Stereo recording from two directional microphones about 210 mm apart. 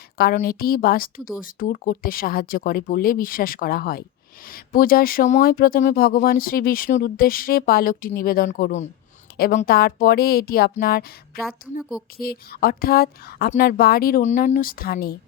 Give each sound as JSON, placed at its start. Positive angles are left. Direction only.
{"t": 0.3, "sound": "speech", "side_deg": 45}
{"t": 12.1, "sound": "speech", "side_deg": 45}